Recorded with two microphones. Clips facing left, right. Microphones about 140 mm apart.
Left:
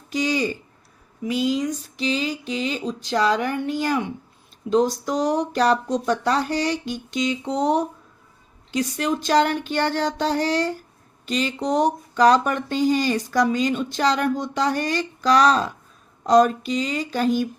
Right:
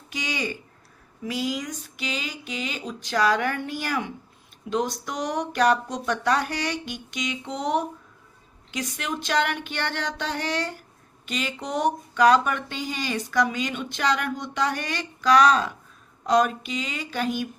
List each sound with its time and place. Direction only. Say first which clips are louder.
0.1 s speech: left 8 dB; 35° left (ahead or behind)
1.2 s a sound: left 6 dB; 20° left (ahead or behind)
4.7 s speech: left 7 dB; 30° left (ahead or behind)